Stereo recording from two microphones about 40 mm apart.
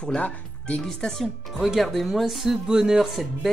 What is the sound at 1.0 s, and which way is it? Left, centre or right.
Speech, centre.